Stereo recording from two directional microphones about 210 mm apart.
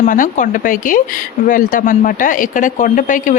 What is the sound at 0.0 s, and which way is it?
Speech, 40° left (ahead or behind).